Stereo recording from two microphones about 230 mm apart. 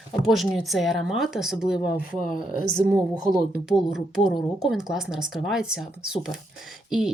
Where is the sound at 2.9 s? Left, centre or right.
Centre.